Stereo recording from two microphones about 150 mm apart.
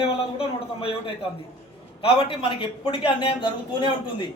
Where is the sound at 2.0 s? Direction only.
35° left (ahead or behind).